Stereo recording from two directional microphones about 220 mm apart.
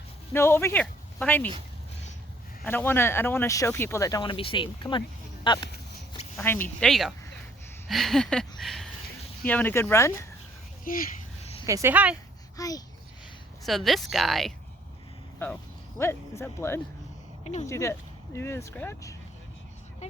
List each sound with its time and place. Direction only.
0.3 s speech: 10° left (ahead or behind)
2.6 s speech: 10° left (ahead or behind)
6.3 s a sound: 10° left (ahead or behind)
9.5 s speech: 10° left (ahead or behind)
10.9 s speech: 40° left (ahead or behind)
11.6 s speech: 15° right (ahead or behind)
12.5 s a child's voice: 15° left (ahead or behind)
13.7 s a sound: centre (ahead or behind)
16.0 s speech: 10° left (ahead or behind)
17.4 s speech: 30° left (ahead or behind)
17.7 s speech: 15° left (ahead or behind)